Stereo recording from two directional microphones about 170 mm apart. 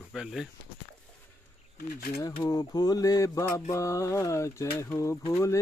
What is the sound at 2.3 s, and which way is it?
Mantra, 25° left (ahead or behind).